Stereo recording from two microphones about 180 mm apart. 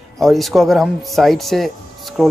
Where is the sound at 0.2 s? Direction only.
Centre (ahead or behind).